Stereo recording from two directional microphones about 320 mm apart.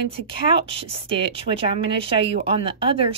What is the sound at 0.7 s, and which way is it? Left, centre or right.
Speech, centre.